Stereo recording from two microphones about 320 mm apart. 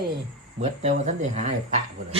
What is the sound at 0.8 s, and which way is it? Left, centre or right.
Speech, right.